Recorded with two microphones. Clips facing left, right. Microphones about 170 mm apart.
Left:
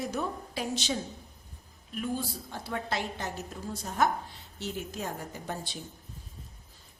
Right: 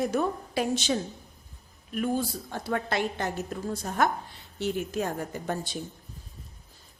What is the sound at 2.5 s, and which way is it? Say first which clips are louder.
A woman's voice: right 5 dB; 60° right (ahead or behind).